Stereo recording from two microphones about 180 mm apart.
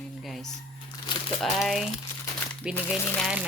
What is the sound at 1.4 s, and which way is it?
Speech, centre (ahead or behind).